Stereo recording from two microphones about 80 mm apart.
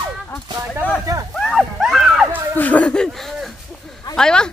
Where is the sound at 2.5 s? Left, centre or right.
Centre.